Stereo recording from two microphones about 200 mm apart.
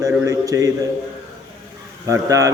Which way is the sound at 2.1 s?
15° right (ahead or behind).